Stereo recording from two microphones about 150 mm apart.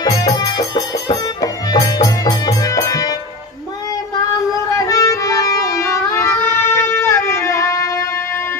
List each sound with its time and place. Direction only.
0.0 s music: 25° left (ahead or behind)
4.7 s music: 20° left (ahead or behind)